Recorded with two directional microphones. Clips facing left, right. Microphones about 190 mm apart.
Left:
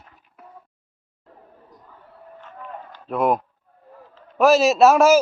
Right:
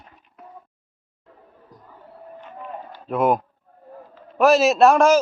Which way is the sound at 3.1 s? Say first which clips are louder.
Right 1 dB; centre (ahead or behind).